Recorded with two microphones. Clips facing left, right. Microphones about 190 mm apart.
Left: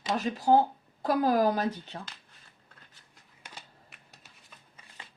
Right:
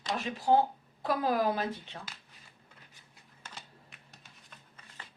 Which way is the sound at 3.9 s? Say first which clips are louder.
Even; centre (ahead or behind).